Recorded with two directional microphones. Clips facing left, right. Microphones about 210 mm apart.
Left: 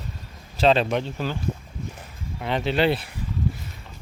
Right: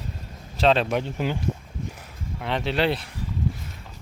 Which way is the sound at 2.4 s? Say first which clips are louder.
Left 2 dB; centre (ahead or behind).